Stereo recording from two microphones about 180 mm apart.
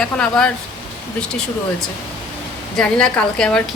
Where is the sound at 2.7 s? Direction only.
5° left (ahead or behind).